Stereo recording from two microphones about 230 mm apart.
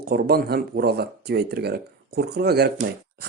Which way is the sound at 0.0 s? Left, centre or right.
Right.